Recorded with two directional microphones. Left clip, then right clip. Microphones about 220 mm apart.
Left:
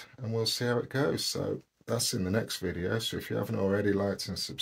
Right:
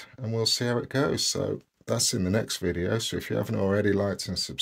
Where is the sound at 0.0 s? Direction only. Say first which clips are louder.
Right 4 dB; 45° right (ahead or behind).